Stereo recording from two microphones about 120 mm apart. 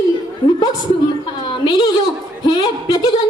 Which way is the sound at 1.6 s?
35° left (ahead or behind).